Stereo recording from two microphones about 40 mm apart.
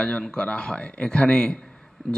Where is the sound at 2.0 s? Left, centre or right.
Centre.